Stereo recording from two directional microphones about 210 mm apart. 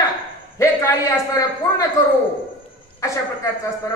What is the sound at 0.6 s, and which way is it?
A man's voice, 15° left (ahead or behind).